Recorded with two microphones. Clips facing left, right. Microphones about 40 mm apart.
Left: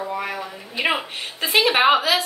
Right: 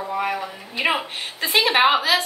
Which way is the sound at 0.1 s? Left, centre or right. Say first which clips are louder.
Right 3 dB; centre.